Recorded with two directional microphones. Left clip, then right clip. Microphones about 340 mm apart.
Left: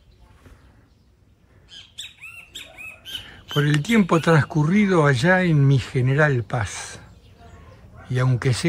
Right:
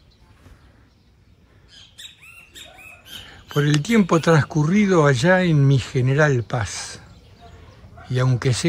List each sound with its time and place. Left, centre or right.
2.5 s rodents: centre
3.3 s speech: centre